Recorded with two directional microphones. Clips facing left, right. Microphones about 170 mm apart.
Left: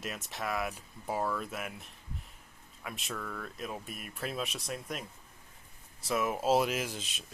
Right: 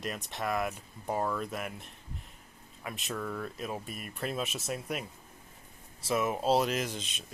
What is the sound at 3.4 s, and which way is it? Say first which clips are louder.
Speech: right 3 dB; centre (ahead or behind).